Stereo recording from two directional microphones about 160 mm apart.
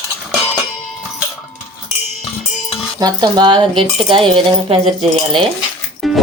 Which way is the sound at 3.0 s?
30° right (ahead or behind).